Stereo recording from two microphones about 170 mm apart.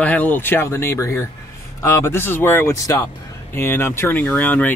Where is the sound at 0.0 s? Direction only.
10° left (ahead or behind).